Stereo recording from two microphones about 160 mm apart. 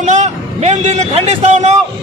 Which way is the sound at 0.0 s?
45° right (ahead or behind).